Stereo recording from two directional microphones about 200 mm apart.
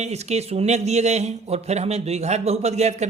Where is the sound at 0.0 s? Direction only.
35° right (ahead or behind).